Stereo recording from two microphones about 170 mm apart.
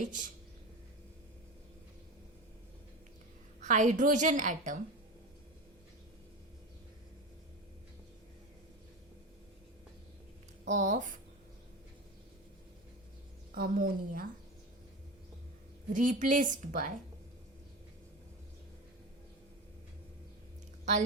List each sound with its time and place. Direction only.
0.0 s a woman's voice: 50° right (ahead or behind)
3.6 s a woman's voice: 45° right (ahead or behind)
10.7 s a woman's voice: 45° right (ahead or behind)
13.5 s a woman's voice: 60° right (ahead or behind)
15.9 s a woman's voice: 50° right (ahead or behind)